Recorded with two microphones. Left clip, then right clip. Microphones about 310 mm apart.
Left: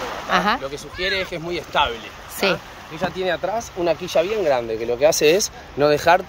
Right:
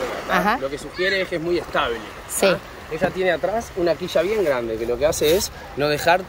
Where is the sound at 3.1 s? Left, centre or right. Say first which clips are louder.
Even; left.